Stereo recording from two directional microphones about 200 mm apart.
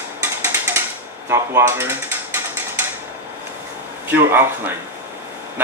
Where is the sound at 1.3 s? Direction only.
15° right (ahead or behind).